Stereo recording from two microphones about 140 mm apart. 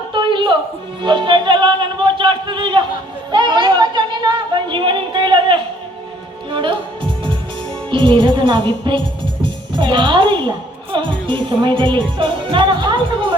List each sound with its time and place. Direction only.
0.1 s a sound: 35° right (ahead or behind)
1.0 s speech: 35° right (ahead or behind)
7.9 s speech: 35° right (ahead or behind)